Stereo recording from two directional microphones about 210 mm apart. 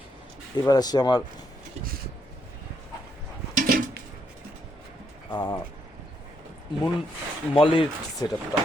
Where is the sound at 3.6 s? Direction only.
45° right (ahead or behind).